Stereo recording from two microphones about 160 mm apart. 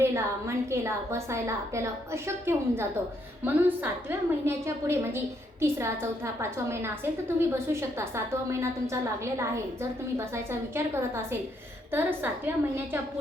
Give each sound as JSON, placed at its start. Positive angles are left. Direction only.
{"t": 0.0, "sound": "a woman's voice", "side_deg": -15}